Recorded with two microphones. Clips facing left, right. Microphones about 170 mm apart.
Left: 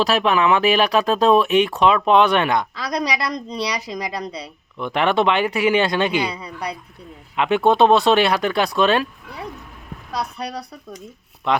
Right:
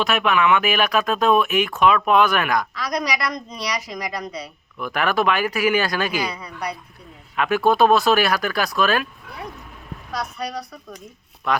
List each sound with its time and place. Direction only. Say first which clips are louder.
0.0 s speech: left 2 dB; 30° left (ahead or behind)
10.1 s speech: left 1 dB; 30° left (ahead or behind)